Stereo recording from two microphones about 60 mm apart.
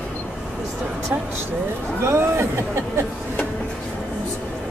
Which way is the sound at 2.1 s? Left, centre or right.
Right.